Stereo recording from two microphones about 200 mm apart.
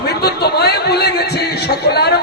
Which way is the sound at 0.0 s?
55° left (ahead or behind).